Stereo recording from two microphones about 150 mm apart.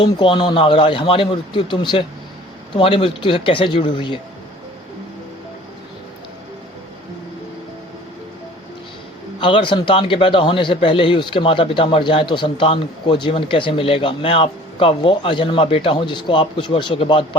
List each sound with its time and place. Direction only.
0.0 s a man's voice: 35° left (ahead or behind)
9.4 s a man's voice: 35° left (ahead or behind)